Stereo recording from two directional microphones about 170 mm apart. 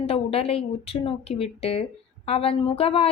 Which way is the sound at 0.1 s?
35° left (ahead or behind).